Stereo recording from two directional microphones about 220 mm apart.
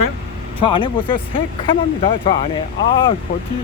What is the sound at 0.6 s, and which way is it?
Speech, 20° left (ahead or behind).